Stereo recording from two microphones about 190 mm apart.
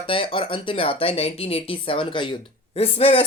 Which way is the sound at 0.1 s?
25° left (ahead or behind).